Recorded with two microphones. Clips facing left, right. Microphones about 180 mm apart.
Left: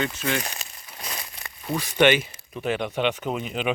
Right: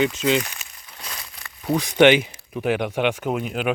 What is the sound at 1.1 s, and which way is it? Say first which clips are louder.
Crumpling: left 2 dB; 20° left (ahead or behind).